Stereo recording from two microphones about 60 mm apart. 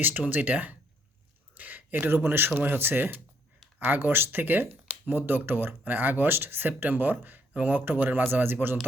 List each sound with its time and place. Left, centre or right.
0.3 s speech: right
1.5 s a sound: right
2.6 s speech: right